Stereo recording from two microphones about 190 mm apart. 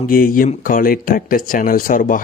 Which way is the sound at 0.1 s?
50° left (ahead or behind).